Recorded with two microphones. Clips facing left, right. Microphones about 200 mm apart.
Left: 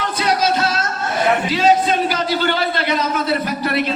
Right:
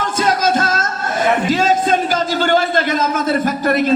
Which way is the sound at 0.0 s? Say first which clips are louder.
Right 2 dB; 45° right (ahead or behind).